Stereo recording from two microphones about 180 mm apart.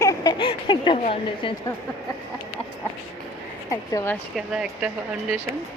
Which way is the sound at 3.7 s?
15° left (ahead or behind).